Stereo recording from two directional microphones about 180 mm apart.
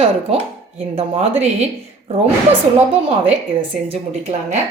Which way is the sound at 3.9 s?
35° right (ahead or behind).